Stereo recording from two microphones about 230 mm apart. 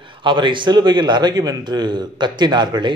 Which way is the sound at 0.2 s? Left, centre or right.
Right.